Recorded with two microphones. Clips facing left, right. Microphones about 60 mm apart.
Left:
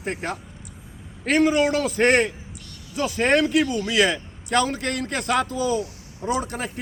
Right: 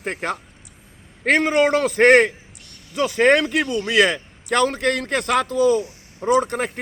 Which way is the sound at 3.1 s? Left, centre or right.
Right.